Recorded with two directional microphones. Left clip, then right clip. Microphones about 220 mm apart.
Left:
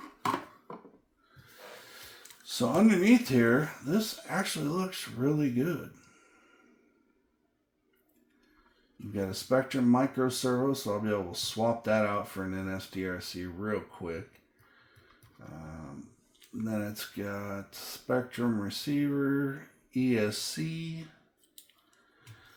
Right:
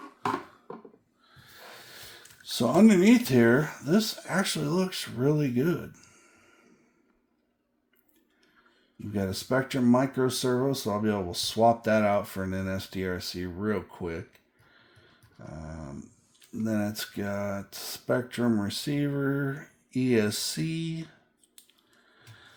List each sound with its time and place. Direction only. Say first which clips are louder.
2.4 s speech: right 4 dB; 45° right (ahead or behind)
9.1 s speech: even; 45° right (ahead or behind)
15.4 s dog: right 5 dB; 45° right (ahead or behind)
16.6 s speech: right 5 dB; 50° right (ahead or behind)